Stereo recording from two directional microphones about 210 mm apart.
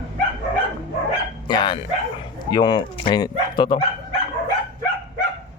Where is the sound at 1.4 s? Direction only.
20° left (ahead or behind).